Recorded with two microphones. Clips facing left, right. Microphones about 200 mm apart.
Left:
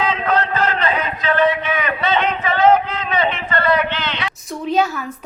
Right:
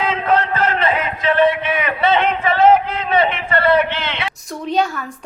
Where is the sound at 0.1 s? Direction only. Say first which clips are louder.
Right 1 dB; 25° right (ahead or behind).